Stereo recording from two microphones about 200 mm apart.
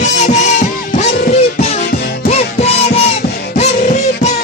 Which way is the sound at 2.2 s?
30° left (ahead or behind).